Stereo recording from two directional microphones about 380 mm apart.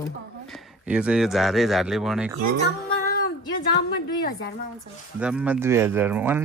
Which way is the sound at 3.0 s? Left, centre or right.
Left.